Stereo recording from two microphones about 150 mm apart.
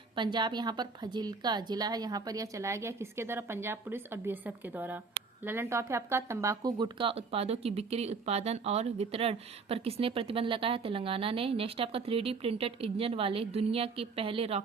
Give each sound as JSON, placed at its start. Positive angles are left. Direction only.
{"t": 0.2, "sound": "a woman's voice", "side_deg": -30}